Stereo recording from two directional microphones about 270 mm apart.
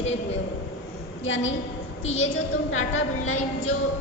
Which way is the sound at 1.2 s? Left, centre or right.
Left.